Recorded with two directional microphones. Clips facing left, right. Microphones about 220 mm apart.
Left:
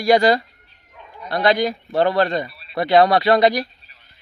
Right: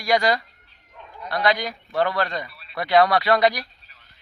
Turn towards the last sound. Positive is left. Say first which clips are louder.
# left 4 dB
turn(degrees=25)  # may be behind; listen again after turning